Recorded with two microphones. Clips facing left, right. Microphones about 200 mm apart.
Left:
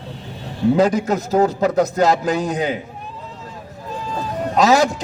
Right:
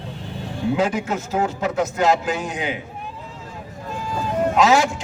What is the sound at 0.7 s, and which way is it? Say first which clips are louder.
A man's voice: left 4 dB; 40° left (ahead or behind).